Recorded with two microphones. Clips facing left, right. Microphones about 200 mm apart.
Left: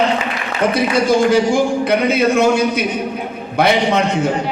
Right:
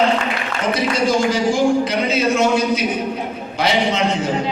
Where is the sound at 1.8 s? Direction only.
60° left (ahead or behind).